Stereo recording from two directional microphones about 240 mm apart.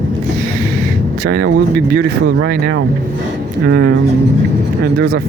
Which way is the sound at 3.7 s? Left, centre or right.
Right.